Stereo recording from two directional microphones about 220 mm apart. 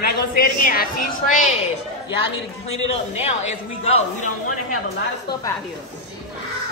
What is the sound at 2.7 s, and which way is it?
A man's voice, 30° left (ahead or behind).